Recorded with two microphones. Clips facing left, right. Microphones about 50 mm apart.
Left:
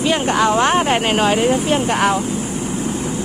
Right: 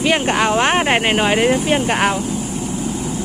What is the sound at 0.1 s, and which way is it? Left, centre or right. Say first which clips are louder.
Speech: left 1 dB; right.